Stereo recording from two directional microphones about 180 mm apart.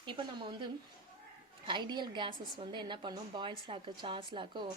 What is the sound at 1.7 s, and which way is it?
A woman's voice, 25° right (ahead or behind).